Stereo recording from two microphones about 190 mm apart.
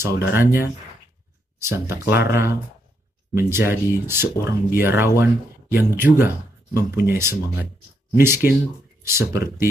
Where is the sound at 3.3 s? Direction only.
10° right (ahead or behind).